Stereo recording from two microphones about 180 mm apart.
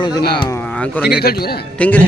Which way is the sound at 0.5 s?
10° left (ahead or behind).